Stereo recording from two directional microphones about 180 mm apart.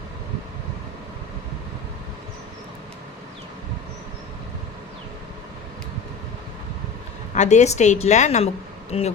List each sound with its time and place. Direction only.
7.3 s a woman's voice: 40° left (ahead or behind)